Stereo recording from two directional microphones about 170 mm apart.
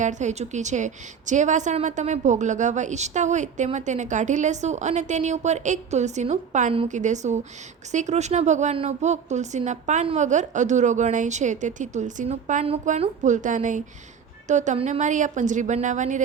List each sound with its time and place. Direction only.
0.0 s a woman's voice: 45° right (ahead or behind)